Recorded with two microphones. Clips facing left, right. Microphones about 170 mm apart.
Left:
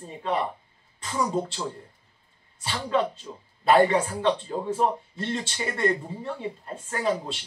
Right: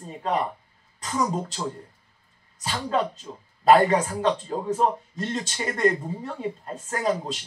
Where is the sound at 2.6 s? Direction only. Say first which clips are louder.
Even; 40° right (ahead or behind).